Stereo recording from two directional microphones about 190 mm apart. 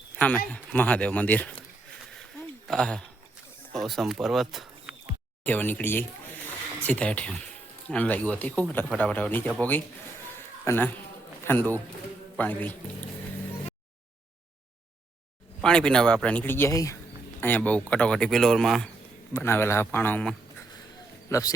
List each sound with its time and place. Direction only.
0.2 s speech: 10° left (ahead or behind)
2.6 s speech: 5° left (ahead or behind)
15.6 s speech: 5° left (ahead or behind)
19.3 s speech: 15° left (ahead or behind)